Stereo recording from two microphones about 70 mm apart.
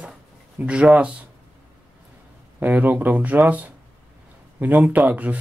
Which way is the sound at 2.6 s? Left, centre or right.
Right.